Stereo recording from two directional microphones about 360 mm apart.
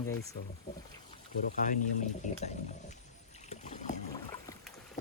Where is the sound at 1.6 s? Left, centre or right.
Left.